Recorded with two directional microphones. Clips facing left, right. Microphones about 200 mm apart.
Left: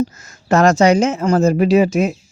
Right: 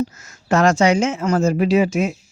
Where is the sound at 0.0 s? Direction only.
35° left (ahead or behind).